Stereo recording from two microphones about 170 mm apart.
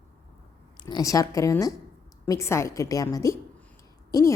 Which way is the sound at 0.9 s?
20° left (ahead or behind).